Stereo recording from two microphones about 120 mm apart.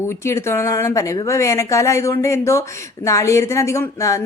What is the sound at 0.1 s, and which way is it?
A woman's voice, 25° left (ahead or behind).